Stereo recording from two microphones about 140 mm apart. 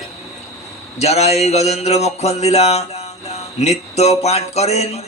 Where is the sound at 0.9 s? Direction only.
50° left (ahead or behind).